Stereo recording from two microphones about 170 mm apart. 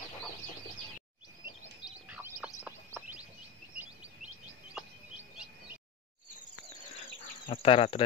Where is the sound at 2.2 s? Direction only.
5° right (ahead or behind).